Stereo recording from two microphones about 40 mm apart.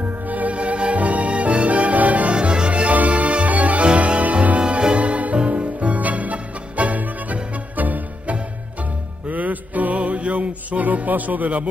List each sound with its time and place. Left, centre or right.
0.0 s music: right
2.3 s music: right
4.6 s music: right